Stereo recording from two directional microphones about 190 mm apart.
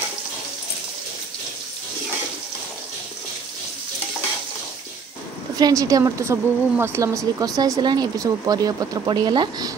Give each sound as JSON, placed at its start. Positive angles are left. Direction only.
{"t": 5.6, "sound": "a woman's voice", "side_deg": -20}